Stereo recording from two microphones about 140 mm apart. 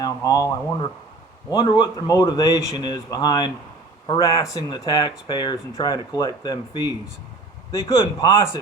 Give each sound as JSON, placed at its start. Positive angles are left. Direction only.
{"t": 0.0, "sound": "a man's voice", "side_deg": 25}